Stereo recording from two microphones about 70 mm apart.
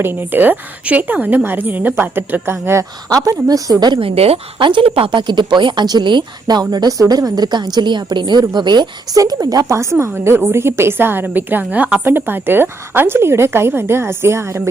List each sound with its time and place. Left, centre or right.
0.0 s a woman's voice: right
3.1 s a woman's voice: right
5.2 s speech: right
9.1 s a woman's voice: right
10.0 s a woman's voice: right